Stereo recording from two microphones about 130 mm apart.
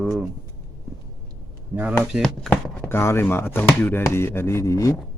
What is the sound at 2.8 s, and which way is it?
Speech, 20° left (ahead or behind).